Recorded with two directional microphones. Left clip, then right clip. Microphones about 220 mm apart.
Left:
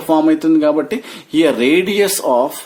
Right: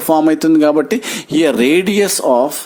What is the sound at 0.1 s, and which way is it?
Speech, 30° right (ahead or behind).